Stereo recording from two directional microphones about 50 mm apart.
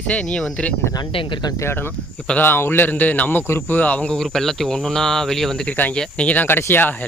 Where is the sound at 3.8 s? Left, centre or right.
Left.